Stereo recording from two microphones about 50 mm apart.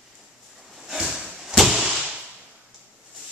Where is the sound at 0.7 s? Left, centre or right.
Centre.